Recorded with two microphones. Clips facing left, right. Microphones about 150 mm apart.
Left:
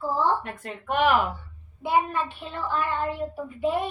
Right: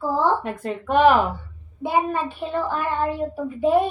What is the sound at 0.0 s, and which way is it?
A child's voice, 40° right (ahead or behind).